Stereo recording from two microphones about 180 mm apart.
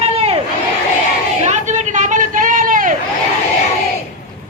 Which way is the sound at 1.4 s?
40° right (ahead or behind).